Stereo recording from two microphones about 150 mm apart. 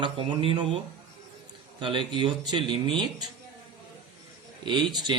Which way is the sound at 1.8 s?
35° right (ahead or behind).